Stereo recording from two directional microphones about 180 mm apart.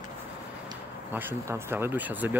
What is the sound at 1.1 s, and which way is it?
Speech, 10° right (ahead or behind).